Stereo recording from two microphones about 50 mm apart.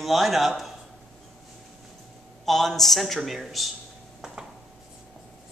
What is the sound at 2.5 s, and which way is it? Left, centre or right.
A man's voice, centre.